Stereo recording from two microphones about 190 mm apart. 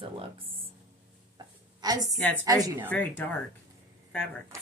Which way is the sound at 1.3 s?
20° right (ahead or behind).